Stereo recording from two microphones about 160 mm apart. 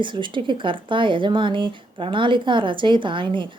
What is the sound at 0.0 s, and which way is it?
A woman's voice, 30° right (ahead or behind).